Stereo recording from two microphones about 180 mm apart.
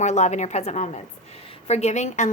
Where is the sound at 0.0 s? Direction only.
40° left (ahead or behind).